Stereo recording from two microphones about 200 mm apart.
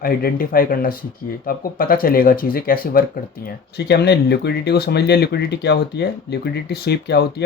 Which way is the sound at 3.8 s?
55° left (ahead or behind).